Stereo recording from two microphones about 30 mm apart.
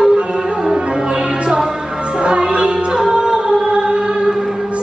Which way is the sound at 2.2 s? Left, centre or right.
Right.